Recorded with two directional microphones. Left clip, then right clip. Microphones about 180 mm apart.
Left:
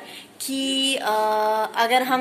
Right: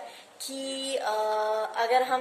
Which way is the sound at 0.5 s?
5° left (ahead or behind).